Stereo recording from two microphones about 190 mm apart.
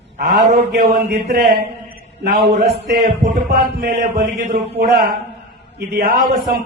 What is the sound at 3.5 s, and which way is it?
Mantra, 55° right (ahead or behind).